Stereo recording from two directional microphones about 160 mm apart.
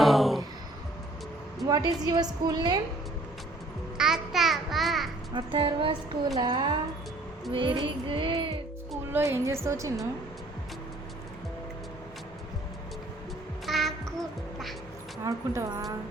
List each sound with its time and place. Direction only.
0.0 s a sound: centre (ahead or behind)
1.6 s a woman's voice: 25° right (ahead or behind)
3.9 s babbling: 5° right (ahead or behind)
5.3 s a woman's voice: 30° right (ahead or behind)
7.5 s music: 30° right (ahead or behind)
9.1 s a woman's voice: 15° right (ahead or behind)
13.7 s music: centre (ahead or behind)
15.2 s a woman's voice: 20° right (ahead or behind)